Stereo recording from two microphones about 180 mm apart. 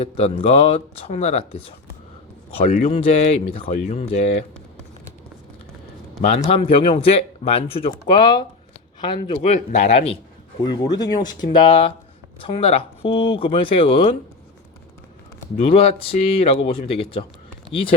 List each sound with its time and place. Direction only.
0.0 s speech: 35° left (ahead or behind)
6.5 s speech: 30° left (ahead or behind)
9.4 s speech: 40° left (ahead or behind)
15.5 s speech: 35° left (ahead or behind)